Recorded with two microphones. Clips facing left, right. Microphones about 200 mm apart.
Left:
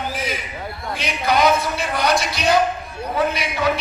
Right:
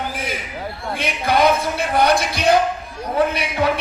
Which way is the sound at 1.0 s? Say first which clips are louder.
Right 1 dB; 55° right (ahead or behind).